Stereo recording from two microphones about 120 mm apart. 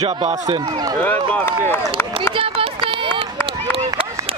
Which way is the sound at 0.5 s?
35° right (ahead or behind).